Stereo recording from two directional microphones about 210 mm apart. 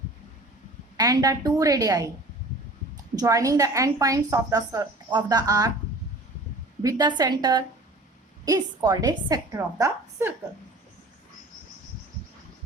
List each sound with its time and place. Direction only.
0.9 s a woman's voice: 20° right (ahead or behind)
3.2 s a woman's voice: 15° right (ahead or behind)
6.8 s a woman's voice: 20° right (ahead or behind)